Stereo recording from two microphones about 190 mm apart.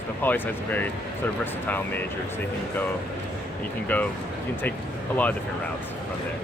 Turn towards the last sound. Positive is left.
turn(degrees=10)  # may be behind; listen again after turning